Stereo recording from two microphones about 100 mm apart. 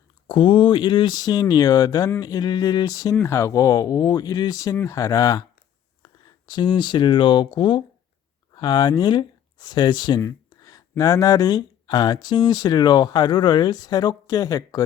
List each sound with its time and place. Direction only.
0.3 s speech: 55° left (ahead or behind); by 3.2 s 40° left (ahead or behind)
3.2 s speech: 30° left (ahead or behind)